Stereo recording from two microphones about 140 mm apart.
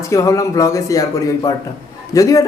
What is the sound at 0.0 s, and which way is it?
Speech, 20° left (ahead or behind).